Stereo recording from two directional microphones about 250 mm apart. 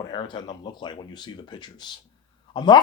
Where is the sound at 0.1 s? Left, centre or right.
Centre.